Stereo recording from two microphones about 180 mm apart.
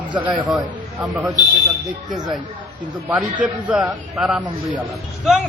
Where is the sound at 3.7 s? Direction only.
5° right (ahead or behind).